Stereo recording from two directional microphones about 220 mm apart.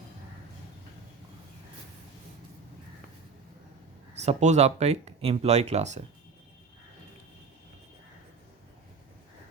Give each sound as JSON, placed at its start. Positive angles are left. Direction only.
{"t": 4.1, "sound": "speech", "side_deg": -30}